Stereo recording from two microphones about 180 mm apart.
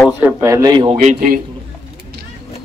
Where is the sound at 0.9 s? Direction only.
45° right (ahead or behind).